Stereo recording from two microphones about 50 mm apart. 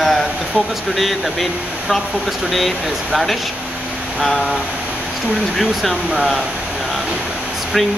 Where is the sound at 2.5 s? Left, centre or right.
Centre.